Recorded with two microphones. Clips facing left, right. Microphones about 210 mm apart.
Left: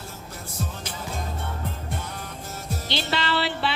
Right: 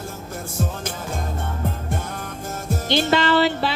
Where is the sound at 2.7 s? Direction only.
50° right (ahead or behind).